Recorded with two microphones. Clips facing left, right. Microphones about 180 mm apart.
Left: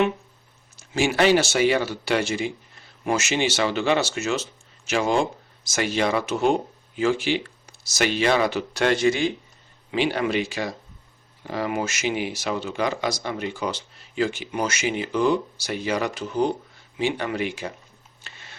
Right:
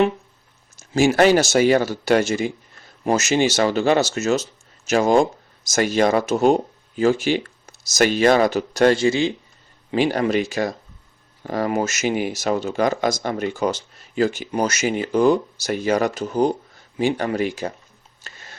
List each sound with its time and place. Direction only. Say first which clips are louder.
0.8 s speech: right 5 dB; 45° right (ahead or behind)
9.0 s a man's voice: right 2 dB; 25° right (ahead or behind)
9.9 s speech: right 4 dB; 40° right (ahead or behind)
18.2 s a sound: right 3 dB; 40° right (ahead or behind)